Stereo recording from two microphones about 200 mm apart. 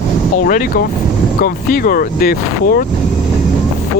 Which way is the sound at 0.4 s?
45° left (ahead or behind).